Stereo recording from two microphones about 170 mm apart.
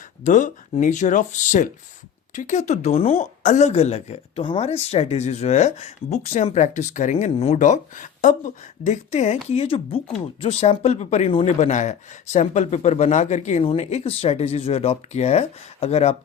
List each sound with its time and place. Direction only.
0.3 s speech: 50° left (ahead or behind)